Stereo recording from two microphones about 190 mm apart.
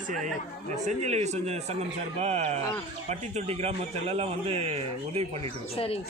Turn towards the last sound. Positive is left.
turn(degrees=30)  # may be behind; listen again after turning